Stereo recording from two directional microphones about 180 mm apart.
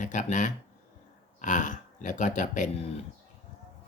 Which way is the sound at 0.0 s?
40° left (ahead or behind).